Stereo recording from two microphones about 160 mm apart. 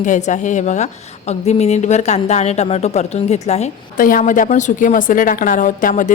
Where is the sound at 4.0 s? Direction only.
60° left (ahead or behind).